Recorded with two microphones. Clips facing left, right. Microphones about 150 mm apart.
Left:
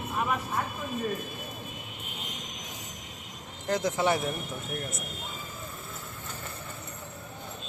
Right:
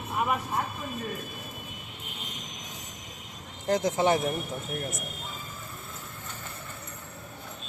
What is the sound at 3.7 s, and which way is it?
Speech, 25° right (ahead or behind).